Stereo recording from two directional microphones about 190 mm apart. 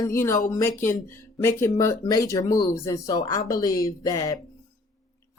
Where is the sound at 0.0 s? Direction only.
15° left (ahead or behind).